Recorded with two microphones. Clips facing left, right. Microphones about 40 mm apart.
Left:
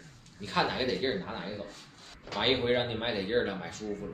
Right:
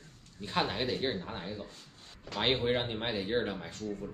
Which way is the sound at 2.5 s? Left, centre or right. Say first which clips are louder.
Left 2 dB; left.